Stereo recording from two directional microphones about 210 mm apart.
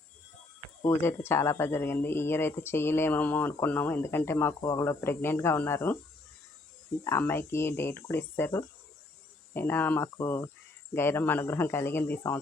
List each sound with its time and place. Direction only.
0.9 s speech: 10° left (ahead or behind)
7.0 s speech: 10° left (ahead or behind)